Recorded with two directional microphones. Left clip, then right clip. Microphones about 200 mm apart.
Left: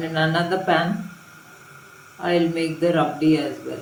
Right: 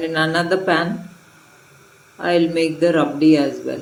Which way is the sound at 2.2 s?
50° right (ahead or behind).